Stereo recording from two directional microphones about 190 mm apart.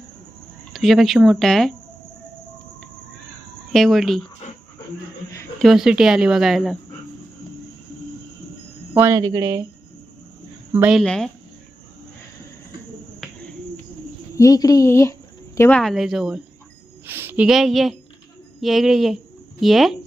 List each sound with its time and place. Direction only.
0.7 s speech: centre (ahead or behind)
3.7 s speech: centre (ahead or behind)
5.5 s speech: centre (ahead or behind)
9.0 s speech: 15° right (ahead or behind)
10.7 s speech: 10° right (ahead or behind)
11.0 s speech: 5° left (ahead or behind)
14.3 s speech: 20° left (ahead or behind)
15.8 s a woman's voice: centre (ahead or behind)